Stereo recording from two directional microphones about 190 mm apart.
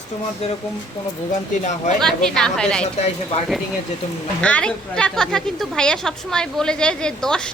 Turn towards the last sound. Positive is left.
turn(degrees=5)  # may be behind; listen again after turning